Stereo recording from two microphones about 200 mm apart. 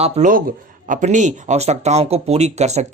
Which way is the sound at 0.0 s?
40° right (ahead or behind).